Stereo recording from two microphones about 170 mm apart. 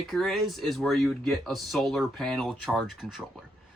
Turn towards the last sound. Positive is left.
turn(degrees=-5)  # may be behind; listen again after turning